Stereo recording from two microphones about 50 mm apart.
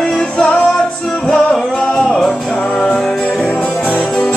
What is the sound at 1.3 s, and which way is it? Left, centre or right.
Music, centre.